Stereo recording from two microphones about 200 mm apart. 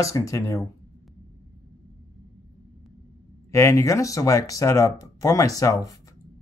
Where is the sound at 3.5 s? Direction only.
15° left (ahead or behind).